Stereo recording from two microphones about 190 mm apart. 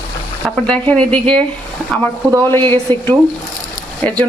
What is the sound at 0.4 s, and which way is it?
Speech, 5° left (ahead or behind).